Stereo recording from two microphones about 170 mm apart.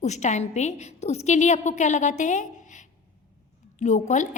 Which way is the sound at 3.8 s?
45° left (ahead or behind).